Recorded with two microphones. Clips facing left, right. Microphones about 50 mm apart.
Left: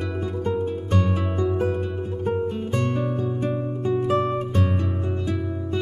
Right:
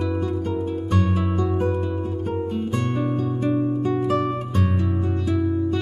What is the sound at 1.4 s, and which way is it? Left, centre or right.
Music, centre.